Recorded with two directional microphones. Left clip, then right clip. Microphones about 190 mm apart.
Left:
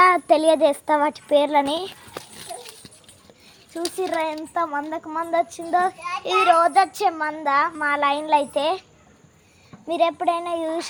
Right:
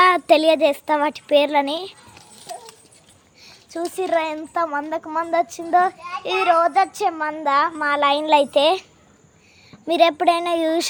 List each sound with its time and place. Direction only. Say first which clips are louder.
0.0 s speech: right 1 dB; 20° right (ahead or behind)
1.6 s speech: even; 5° left (ahead or behind)
3.7 s speech: right 4 dB; 35° right (ahead or behind)
6.2 s a child's voice: even; 10° right (ahead or behind); by 8.8 s 55° right (ahead or behind)
9.8 s speech: right 5 dB; 65° right (ahead or behind)